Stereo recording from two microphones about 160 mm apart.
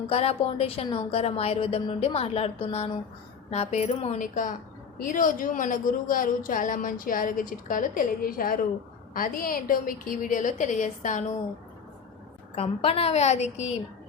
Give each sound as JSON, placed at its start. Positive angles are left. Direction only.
{"t": 0.1, "sound": "a woman's voice", "side_deg": 40}
{"t": 12.5, "sound": "a woman's voice", "side_deg": 40}